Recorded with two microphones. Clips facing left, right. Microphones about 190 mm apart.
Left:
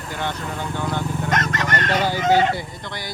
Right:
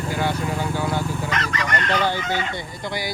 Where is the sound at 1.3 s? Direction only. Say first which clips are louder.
Left 2 dB; 45° left (ahead or behind).